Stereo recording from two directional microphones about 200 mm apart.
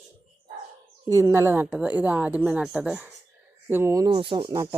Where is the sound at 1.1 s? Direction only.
15° right (ahead or behind).